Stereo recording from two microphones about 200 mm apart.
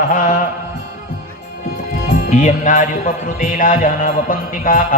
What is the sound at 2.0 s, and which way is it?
A man's voice, 40° left (ahead or behind).